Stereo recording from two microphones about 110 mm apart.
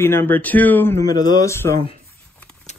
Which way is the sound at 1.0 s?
35° left (ahead or behind).